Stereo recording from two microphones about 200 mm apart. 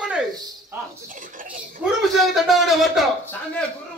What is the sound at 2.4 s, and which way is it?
Speech, centre (ahead or behind).